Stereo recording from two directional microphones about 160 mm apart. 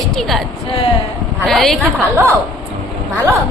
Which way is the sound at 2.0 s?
15° right (ahead or behind).